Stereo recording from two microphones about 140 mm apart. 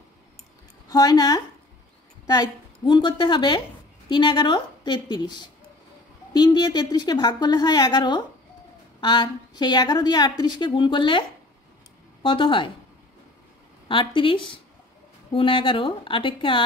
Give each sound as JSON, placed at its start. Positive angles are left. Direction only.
{"t": 0.8, "sound": "a woman's voice", "side_deg": 25}
{"t": 13.8, "sound": "a woman's voice", "side_deg": 35}